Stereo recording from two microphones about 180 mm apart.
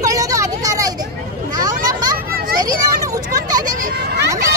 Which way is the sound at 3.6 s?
45° right (ahead or behind).